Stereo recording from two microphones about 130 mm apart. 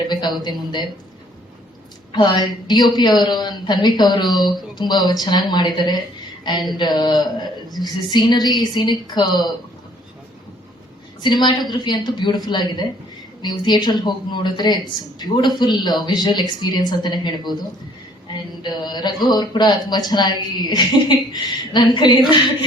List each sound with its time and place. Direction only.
0.1 s speech: 35° left (ahead or behind)
2.1 s a woman's voice: 35° left (ahead or behind)
6.4 s a sound: 35° left (ahead or behind)
6.7 s a woman's voice: 35° left (ahead or behind)
11.2 s a woman's voice: 35° left (ahead or behind)